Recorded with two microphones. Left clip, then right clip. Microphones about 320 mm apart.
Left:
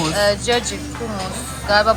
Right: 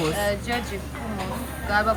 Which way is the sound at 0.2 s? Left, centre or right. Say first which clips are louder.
Left 9 dB; centre.